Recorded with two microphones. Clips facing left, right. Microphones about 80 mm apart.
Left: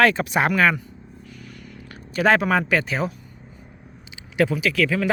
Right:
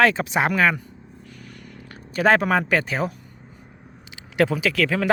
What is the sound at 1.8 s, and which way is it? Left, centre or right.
Speech, right.